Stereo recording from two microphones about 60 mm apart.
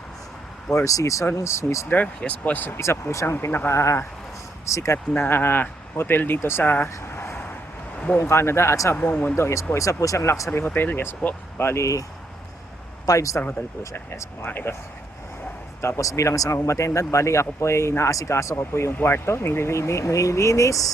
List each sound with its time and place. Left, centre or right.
0.9 s speech: left
1.4 s speech: left
1.9 s speech: left
2.7 s speech: left
5.1 s speech: left
7.9 s a sound: left
8.2 s speech: left
10.8 s speech: left
13.1 s speech: left
14.4 s speech: left
16.0 s speech: left